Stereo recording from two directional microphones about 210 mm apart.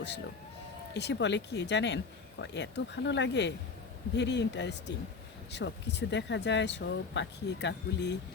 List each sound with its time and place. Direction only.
0.9 s speech: 55° left (ahead or behind)